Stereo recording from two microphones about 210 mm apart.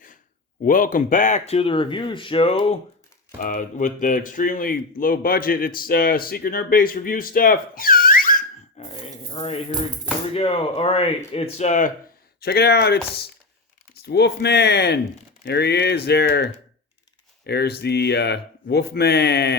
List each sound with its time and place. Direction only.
0.6 s speech: 40° left (ahead or behind)
3.4 s speech: 40° left (ahead or behind)
8.9 s a sound: 25° left (ahead or behind)
10.3 s speech: 25° left (ahead or behind)
12.4 s speech: 50° left (ahead or behind)